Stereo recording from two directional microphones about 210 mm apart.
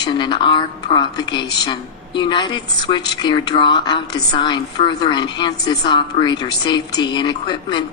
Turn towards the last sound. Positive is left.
turn(degrees=20)  # may be behind; listen again after turning